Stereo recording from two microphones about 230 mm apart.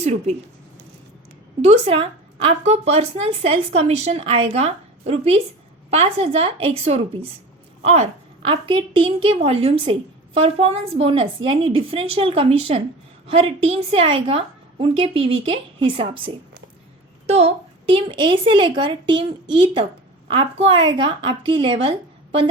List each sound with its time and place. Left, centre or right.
0.0 s speech: right
1.6 s speech: right